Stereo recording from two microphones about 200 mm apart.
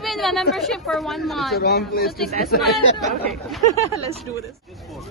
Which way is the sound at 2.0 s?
Centre (ahead or behind).